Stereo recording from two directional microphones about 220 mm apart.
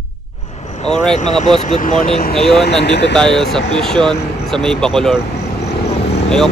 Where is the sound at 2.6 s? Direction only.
50° left (ahead or behind).